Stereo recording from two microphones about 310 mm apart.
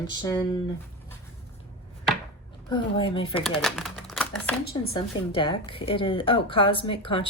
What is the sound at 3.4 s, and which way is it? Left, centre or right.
Speech, centre.